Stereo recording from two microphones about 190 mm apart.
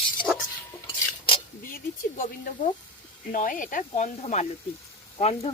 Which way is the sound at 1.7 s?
45° left (ahead or behind).